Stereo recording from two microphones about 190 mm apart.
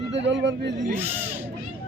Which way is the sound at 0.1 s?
70° right (ahead or behind).